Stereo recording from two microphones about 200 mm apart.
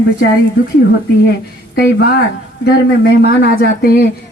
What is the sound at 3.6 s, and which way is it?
Speech, 50° left (ahead or behind).